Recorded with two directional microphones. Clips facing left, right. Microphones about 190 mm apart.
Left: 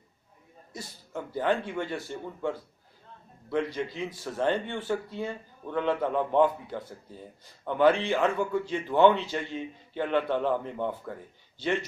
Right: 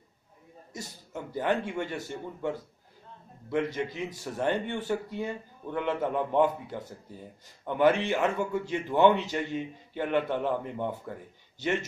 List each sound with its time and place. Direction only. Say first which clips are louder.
0.7 s a man's voice: left 1 dB; 20° right (ahead or behind)